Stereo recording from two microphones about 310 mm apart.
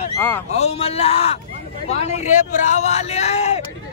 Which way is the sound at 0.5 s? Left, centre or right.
Centre.